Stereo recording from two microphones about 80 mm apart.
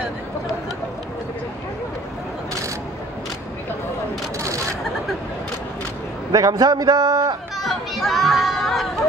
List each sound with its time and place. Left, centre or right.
4.4 s single-lens reflex camera: right
6.3 s a man's voice: right
7.5 s music: centre